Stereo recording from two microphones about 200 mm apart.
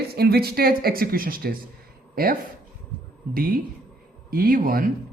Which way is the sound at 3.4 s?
45° right (ahead or behind).